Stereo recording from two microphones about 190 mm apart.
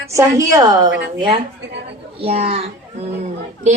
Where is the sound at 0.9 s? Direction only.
60° right (ahead or behind).